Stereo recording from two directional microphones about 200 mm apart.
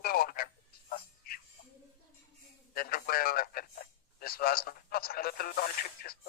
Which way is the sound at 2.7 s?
45° left (ahead or behind).